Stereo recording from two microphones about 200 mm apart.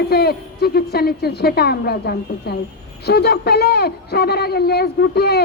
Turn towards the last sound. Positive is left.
turn(degrees=50)  # may be behind; listen again after turning